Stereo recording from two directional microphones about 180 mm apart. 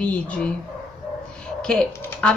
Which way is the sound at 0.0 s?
5° left (ahead or behind).